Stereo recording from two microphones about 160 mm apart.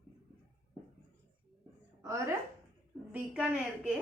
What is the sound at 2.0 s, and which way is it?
A woman's voice, 20° right (ahead or behind).